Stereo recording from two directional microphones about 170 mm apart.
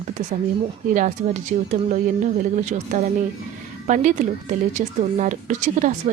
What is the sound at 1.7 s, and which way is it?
Speech, 45° right (ahead or behind).